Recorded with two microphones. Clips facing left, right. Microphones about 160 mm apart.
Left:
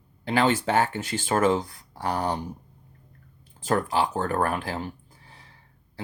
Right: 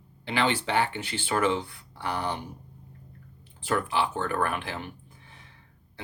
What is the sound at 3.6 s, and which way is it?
Speech, 40° left (ahead or behind).